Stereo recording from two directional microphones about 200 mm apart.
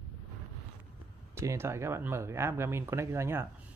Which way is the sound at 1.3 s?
15° right (ahead or behind).